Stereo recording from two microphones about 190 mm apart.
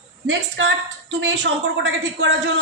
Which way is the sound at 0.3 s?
70° right (ahead or behind).